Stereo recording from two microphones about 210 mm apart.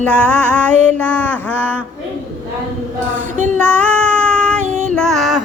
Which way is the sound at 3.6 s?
5° left (ahead or behind).